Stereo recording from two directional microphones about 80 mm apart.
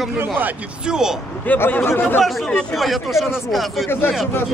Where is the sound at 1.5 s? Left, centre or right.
Left.